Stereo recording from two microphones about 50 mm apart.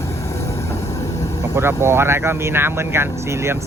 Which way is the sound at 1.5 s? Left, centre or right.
Right.